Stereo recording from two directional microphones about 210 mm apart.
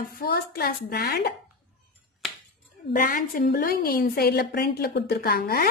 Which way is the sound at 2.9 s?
45° left (ahead or behind).